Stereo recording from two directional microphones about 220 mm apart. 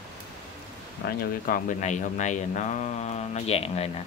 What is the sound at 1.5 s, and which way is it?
Speech, 35° left (ahead or behind).